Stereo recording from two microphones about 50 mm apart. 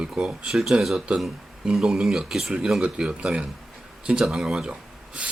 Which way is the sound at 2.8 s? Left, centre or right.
Right.